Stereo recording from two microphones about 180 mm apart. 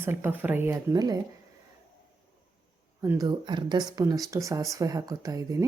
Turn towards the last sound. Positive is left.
turn(degrees=-20)  # may be behind; listen again after turning